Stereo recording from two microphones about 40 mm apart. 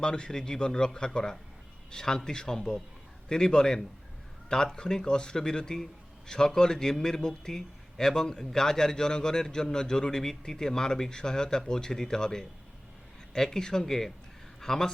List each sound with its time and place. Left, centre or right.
0.0 s a man's voice: centre